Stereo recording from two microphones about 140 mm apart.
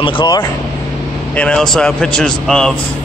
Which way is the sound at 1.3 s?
5° left (ahead or behind).